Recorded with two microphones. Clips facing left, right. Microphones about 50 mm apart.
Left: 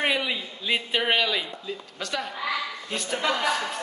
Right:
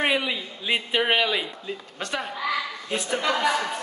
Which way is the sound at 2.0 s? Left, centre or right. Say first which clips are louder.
Right 1 dB; right.